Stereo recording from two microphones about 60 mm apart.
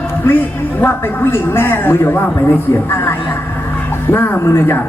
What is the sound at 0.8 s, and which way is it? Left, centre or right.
A man's voice, left.